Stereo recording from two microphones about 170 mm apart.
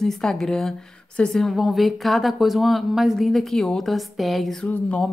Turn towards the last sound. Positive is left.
turn(degrees=5)  # may be behind; listen again after turning